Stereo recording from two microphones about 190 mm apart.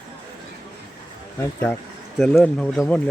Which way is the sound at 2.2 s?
Centre (ahead or behind).